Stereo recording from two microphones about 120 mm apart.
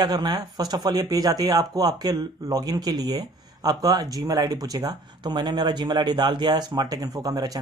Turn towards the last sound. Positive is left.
turn(degrees=-30)  # may be behind; listen again after turning